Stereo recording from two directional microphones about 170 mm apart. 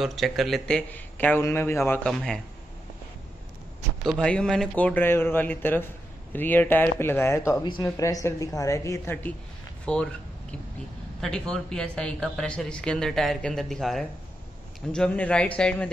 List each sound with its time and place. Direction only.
0.0 s a man's voice: centre (ahead or behind)
2.0 s a man's voice: 5° left (ahead or behind)
4.0 s a man's voice: 5° left (ahead or behind)
11.1 s a man's voice: 5° left (ahead or behind)